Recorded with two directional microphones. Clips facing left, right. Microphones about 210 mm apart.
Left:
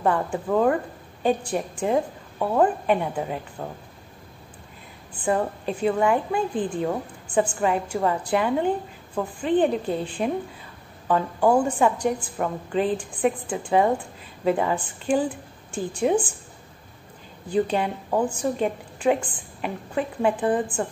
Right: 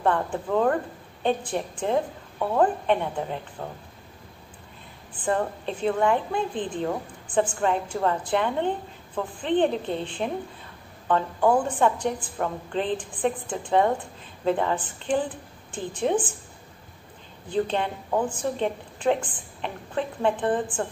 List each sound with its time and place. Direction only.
0.0 s a woman's voice: 5° left (ahead or behind)
5.2 s a woman's voice: 10° left (ahead or behind)
17.5 s a woman's voice: 5° left (ahead or behind)